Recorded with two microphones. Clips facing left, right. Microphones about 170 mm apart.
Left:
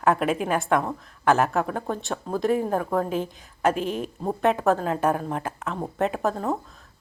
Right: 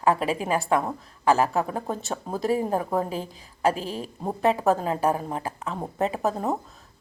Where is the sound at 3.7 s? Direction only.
35° right (ahead or behind).